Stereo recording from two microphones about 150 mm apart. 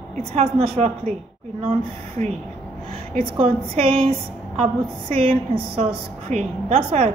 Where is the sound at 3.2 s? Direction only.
40° right (ahead or behind).